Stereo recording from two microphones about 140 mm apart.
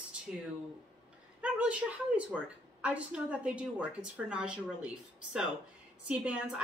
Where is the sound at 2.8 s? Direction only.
10° right (ahead or behind).